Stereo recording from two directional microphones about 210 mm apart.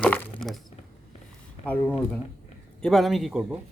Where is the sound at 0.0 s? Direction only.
5° left (ahead or behind).